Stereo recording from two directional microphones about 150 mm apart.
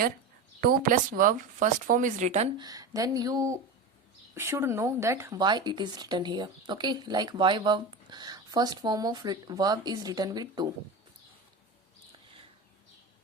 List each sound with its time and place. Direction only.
0.6 s speech: 75° right (ahead or behind); by 2.5 s 50° right (ahead or behind)
2.6 s speech: 25° right (ahead or behind)
5.4 s speech: 30° right (ahead or behind)